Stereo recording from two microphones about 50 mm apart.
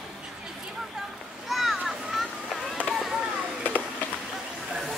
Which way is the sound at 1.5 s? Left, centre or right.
Centre.